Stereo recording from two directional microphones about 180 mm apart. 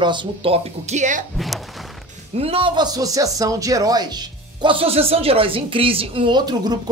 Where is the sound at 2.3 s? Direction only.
30° right (ahead or behind).